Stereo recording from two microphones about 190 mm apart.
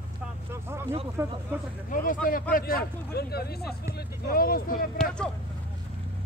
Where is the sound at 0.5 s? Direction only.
15° right (ahead or behind).